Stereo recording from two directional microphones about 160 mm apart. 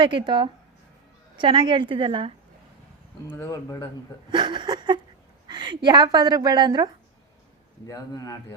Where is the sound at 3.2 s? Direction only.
15° left (ahead or behind).